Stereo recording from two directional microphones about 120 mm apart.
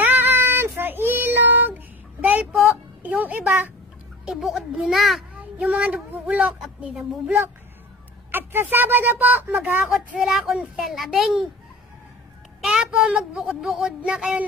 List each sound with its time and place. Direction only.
0.0 s child singing: 15° right (ahead or behind)
2.2 s a sound: 10° right (ahead or behind)
4.3 s speech: 5° right (ahead or behind)
5.6 s speech: 10° right (ahead or behind)
8.3 s speech: 20° right (ahead or behind)
12.6 s speech: 10° right (ahead or behind)